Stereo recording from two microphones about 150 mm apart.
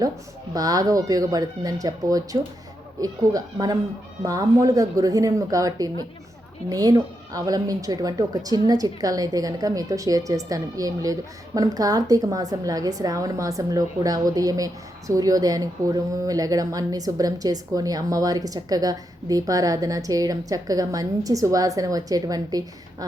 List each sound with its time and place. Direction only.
0.5 s a woman's voice: 25° right (ahead or behind)